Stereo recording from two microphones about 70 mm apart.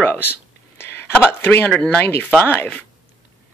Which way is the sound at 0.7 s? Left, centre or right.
Left.